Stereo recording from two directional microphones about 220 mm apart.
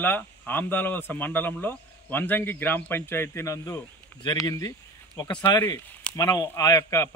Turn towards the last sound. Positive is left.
turn(degrees=15)  # may be behind; listen again after turning